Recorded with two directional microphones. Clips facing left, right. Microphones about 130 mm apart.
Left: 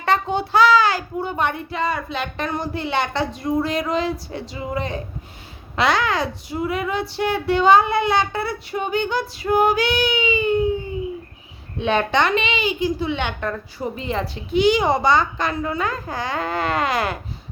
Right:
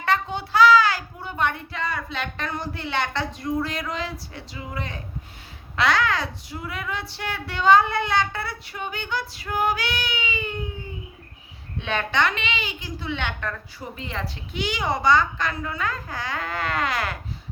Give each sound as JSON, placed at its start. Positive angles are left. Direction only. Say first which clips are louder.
{"t": 0.0, "sound": "a child's voice", "louder": "left 4 dB", "side_deg": 25}
{"t": 11.8, "sound": "a child's voice", "louder": "left 5 dB", "side_deg": 20}